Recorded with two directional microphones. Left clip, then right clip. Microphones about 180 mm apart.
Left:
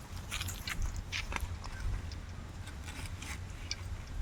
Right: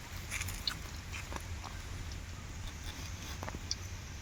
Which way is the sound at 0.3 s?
10° right (ahead or behind).